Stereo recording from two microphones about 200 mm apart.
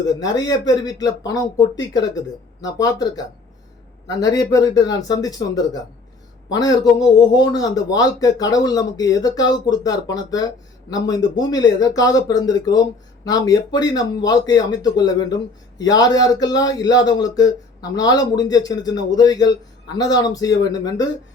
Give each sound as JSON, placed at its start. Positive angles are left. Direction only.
{"t": 0.1, "sound": "speech", "side_deg": 20}